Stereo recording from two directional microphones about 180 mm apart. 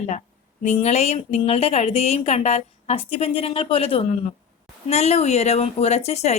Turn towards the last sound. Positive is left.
turn(degrees=35)  # may be behind; listen again after turning